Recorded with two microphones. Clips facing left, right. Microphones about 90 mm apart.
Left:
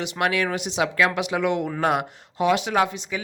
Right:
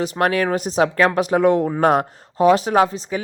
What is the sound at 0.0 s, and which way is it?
A woman's voice, 40° right (ahead or behind).